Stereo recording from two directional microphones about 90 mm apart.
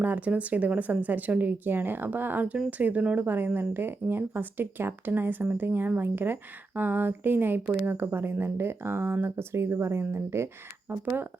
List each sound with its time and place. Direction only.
0.0 s speech: 15° right (ahead or behind)